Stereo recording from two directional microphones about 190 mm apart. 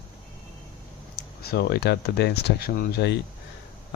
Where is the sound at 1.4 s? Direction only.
60° left (ahead or behind).